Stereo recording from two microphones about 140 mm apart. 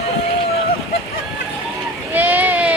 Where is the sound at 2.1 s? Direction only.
15° right (ahead or behind).